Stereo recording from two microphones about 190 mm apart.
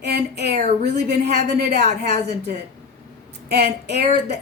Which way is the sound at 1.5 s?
60° right (ahead or behind).